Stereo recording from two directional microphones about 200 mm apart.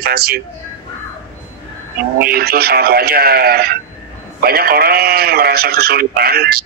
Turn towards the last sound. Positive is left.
turn(degrees=-50)  # may be behind; listen again after turning